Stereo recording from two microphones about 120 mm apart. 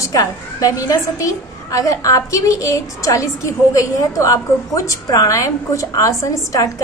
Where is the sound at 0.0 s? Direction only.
30° left (ahead or behind).